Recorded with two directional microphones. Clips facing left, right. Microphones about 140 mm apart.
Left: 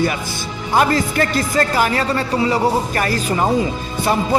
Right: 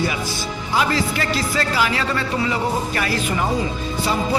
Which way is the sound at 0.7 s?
50° left (ahead or behind).